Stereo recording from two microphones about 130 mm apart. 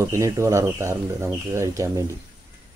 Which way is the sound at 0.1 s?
25° right (ahead or behind).